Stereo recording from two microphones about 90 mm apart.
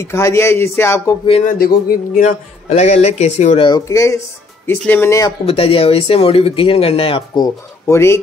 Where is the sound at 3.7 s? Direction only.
35° left (ahead or behind).